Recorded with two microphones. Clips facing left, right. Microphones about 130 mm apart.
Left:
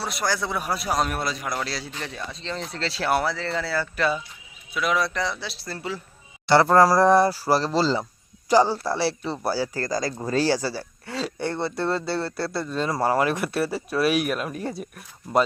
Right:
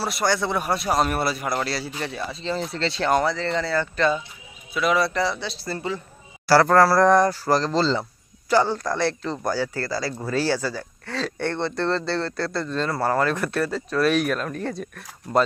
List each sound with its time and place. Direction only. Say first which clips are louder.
0.0 s a man's voice: right 3 dB; centre (ahead or behind)
6.7 s speech: left 1 dB; 15° left (ahead or behind)
9.7 s speech: left 1 dB; 45° left (ahead or behind)
11.0 s speech: right 2 dB; 5° left (ahead or behind)